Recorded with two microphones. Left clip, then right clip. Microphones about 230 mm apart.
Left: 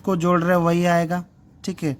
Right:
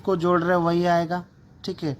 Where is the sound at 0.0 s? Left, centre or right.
Left.